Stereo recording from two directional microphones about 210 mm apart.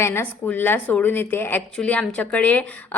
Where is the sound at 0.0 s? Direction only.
10° left (ahead or behind).